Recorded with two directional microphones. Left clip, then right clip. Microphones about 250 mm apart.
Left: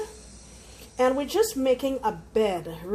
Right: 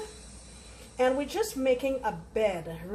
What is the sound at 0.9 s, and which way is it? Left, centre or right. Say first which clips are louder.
A woman's voice: left 4 dB; left.